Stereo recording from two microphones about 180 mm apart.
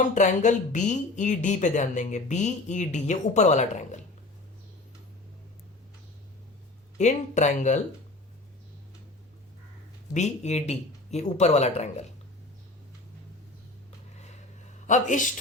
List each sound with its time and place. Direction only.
0.1 s a woman's voice: 45° left (ahead or behind)
7.0 s a woman's voice: 40° left (ahead or behind)
10.2 s a woman's voice: 40° left (ahead or behind)
14.8 s speech: 45° left (ahead or behind)